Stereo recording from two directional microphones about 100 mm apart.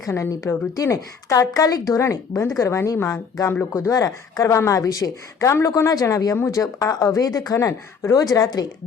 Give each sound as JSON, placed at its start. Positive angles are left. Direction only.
{"t": 0.0, "sound": "a woman's voice", "side_deg": 35}
{"t": 3.5, "sound": "a woman's voice", "side_deg": 25}